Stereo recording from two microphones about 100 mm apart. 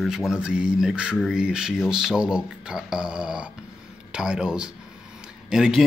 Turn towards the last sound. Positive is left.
turn(degrees=-5)  # may be behind; listen again after turning